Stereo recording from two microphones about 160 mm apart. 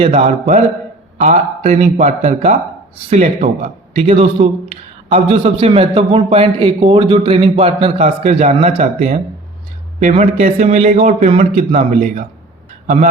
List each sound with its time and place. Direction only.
0.1 s a man's voice: 50° right (ahead or behind)
4.1 s a man's voice: 40° right (ahead or behind)